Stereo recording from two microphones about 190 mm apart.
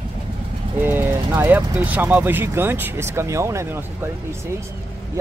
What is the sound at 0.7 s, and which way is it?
Speech, 10° right (ahead or behind).